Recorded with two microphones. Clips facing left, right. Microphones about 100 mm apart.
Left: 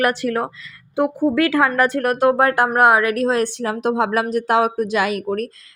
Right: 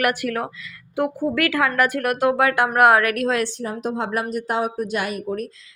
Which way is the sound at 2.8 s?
20° left (ahead or behind).